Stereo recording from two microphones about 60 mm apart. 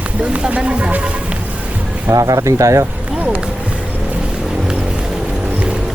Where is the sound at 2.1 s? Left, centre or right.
Right.